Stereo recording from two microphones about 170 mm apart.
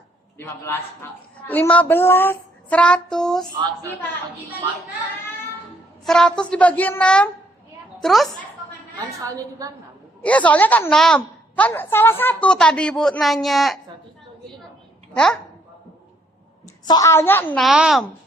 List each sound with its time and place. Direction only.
0.3 s speech: 15° left (ahead or behind)
6.1 s a woman's voice: 5° left (ahead or behind)
9.2 s a woman's voice: 20° right (ahead or behind)
10.2 s a woman's voice: 10° left (ahead or behind)
15.1 s a child's voice: 5° left (ahead or behind)
16.8 s speech: 20° left (ahead or behind)
17.6 s a woman's voice: centre (ahead or behind)